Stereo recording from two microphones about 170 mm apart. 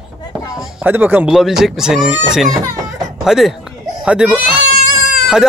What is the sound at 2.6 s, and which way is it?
Speech, 20° right (ahead or behind).